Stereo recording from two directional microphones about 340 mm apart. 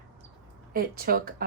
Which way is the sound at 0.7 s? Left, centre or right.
Right.